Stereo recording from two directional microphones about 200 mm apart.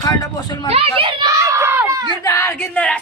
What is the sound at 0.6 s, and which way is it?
A child's voice, 30° right (ahead or behind).